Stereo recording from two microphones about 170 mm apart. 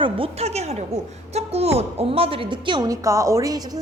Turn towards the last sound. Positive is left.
turn(degrees=-20)  # may be behind; listen again after turning